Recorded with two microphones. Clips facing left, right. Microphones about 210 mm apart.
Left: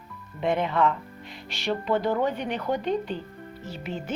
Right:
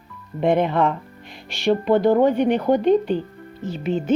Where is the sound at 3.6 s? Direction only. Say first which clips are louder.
Right 11 dB; 20° right (ahead or behind).